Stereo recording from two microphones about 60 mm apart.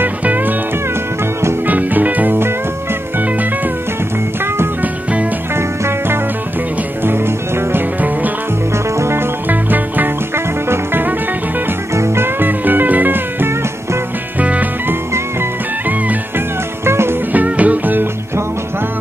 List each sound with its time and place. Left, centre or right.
0.0 s music: right
1.7 s music: right
5.6 s music: right
9.5 s music: right
11.9 s music: right
16.8 s music: right
17.3 s music: right